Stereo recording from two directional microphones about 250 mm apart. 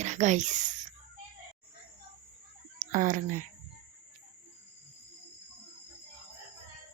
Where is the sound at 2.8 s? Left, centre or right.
Right.